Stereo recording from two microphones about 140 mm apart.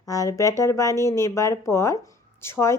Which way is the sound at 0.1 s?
25° left (ahead or behind).